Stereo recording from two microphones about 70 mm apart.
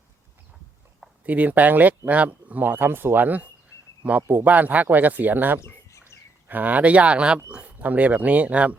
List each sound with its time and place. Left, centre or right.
1.2 s speech: right
5.5 s bird: left
6.5 s speech: right